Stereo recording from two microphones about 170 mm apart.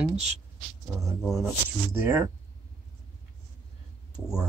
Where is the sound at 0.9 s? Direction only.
15° right (ahead or behind).